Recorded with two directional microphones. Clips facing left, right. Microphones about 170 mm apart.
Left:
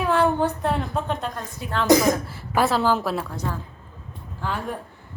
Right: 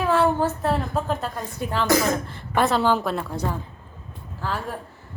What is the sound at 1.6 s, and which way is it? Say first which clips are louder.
Speech: right 5 dB; 50° right (ahead or behind).